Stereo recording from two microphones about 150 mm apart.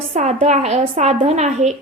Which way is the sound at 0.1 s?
50° right (ahead or behind).